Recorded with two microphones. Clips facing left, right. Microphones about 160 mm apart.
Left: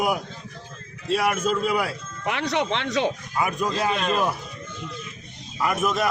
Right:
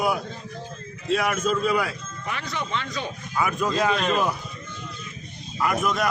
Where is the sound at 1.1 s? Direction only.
10° left (ahead or behind).